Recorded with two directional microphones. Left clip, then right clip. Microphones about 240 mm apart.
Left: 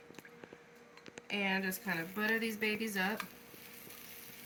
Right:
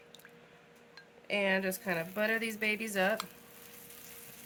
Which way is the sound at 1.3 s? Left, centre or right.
Right.